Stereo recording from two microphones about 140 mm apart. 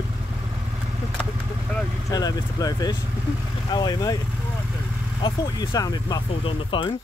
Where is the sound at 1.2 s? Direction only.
5° left (ahead or behind).